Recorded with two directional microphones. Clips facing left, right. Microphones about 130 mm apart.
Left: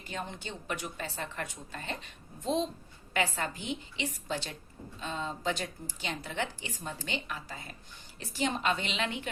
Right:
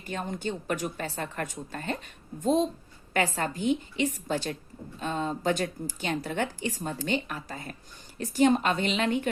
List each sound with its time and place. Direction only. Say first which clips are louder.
0.0 s speech: right 7 dB; 45° right (ahead or behind)